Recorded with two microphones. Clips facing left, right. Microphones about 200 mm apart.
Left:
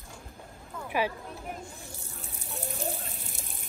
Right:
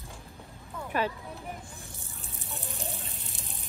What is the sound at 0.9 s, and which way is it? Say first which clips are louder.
Speech: left 1 dB; 10° left (ahead or behind).